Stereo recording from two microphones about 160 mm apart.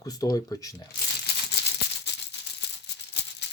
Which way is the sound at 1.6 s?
90° left.